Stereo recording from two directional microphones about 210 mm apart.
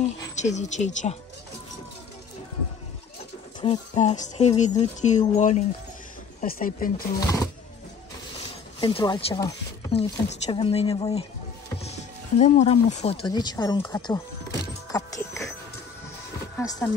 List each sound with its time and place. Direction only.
0.4 s speech: 35° left (ahead or behind)
3.6 s speech: 25° left (ahead or behind); by 6.9 s 40° left (ahead or behind)
7.2 s speech: 15° left (ahead or behind)
8.8 s speech: 20° left (ahead or behind)
11.8 s music: 30° left (ahead or behind); by 15.4 s 15° left (ahead or behind)
16.5 s music: 10° left (ahead or behind)